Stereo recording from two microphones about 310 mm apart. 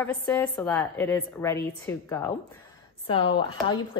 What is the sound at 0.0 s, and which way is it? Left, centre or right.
Speech, centre.